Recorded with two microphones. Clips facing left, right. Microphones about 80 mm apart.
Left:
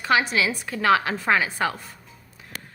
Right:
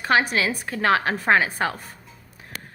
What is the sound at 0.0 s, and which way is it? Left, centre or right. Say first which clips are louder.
A woman's voice: right 1 dB; right.